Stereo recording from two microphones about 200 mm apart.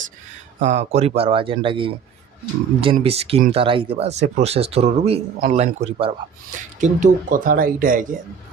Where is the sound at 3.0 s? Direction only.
30° right (ahead or behind).